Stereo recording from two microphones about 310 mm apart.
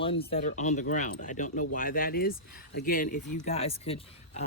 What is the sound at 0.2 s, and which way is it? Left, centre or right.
Speech, left.